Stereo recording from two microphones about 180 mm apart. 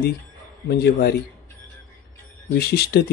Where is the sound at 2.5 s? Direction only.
60° left (ahead or behind).